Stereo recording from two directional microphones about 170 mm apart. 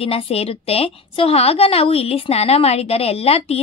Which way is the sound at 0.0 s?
35° left (ahead or behind).